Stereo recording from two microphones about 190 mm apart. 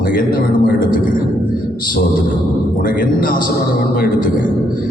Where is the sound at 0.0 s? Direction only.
50° left (ahead or behind).